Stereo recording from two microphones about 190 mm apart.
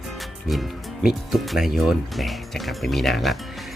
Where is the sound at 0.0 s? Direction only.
Centre (ahead or behind).